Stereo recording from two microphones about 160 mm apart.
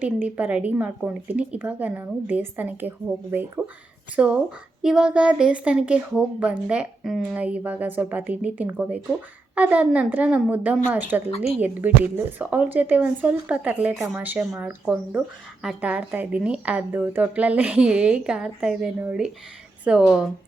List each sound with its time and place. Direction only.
0.0 s a woman's voice: 10° right (ahead or behind)
11.3 s a woman's voice: 40° left (ahead or behind)
11.6 s a woman's voice: 10° right (ahead or behind)